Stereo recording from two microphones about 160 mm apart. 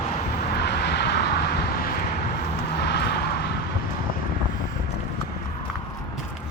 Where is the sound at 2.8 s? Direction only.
90° left.